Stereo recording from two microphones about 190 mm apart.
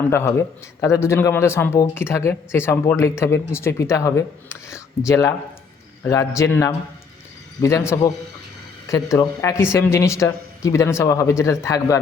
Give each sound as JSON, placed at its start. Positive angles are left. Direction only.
{"t": 0.1, "sound": "a man's voice", "side_deg": 15}